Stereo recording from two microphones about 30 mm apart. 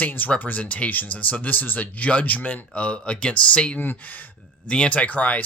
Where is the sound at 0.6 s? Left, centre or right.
Left.